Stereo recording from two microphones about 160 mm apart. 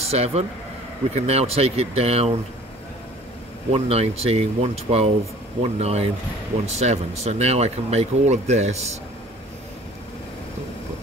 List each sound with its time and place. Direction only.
0.0 s speech: 40° right (ahead or behind)
3.7 s speech: 40° right (ahead or behind)